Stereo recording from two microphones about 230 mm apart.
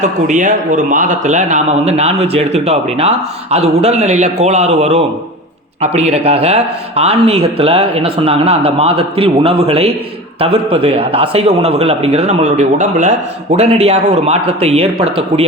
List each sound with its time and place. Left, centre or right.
0.0 s a man's voice: right